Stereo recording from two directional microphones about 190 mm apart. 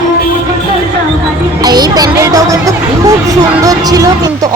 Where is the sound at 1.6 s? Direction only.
20° right (ahead or behind).